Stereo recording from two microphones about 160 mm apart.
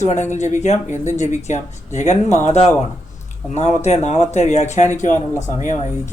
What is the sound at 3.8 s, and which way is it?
Speech, 40° left (ahead or behind).